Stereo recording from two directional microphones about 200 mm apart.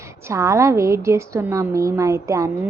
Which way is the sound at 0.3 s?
15° right (ahead or behind).